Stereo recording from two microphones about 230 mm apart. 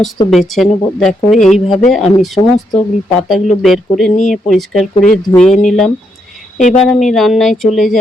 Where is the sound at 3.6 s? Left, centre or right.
Centre.